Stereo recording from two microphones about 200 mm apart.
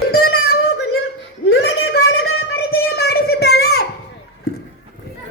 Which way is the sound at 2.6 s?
50° left (ahead or behind).